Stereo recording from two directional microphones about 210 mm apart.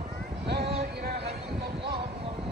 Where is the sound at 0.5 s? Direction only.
50° right (ahead or behind).